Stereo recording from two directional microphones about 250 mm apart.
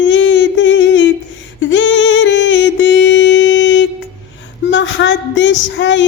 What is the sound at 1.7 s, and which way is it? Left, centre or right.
Music, left.